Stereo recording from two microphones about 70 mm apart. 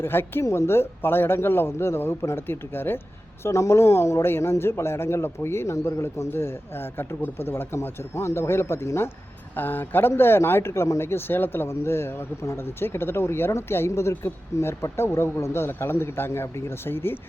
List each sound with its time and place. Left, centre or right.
0.0 s a man's voice: left
3.4 s a man's voice: left